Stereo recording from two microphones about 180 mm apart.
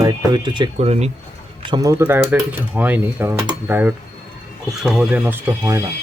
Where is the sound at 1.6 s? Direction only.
20° right (ahead or behind).